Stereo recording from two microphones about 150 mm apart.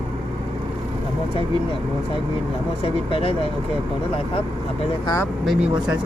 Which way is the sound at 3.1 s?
40° left (ahead or behind).